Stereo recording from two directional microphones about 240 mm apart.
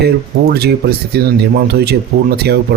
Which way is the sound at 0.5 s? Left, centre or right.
Right.